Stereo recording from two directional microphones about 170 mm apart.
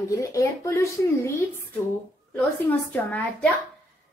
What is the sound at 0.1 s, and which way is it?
A woman's voice, 20° left (ahead or behind).